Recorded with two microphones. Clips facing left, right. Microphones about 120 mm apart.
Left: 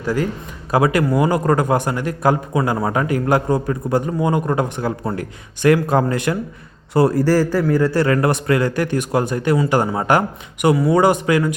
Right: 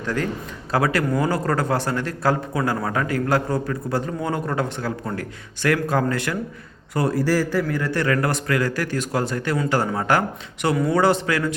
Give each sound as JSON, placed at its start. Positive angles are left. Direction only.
{"t": 0.0, "sound": "a man's voice", "side_deg": 10}
{"t": 6.9, "sound": "a man's voice", "side_deg": 40}